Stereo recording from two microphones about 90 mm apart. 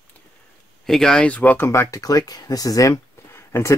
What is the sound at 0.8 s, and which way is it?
Speech, 5° left (ahead or behind).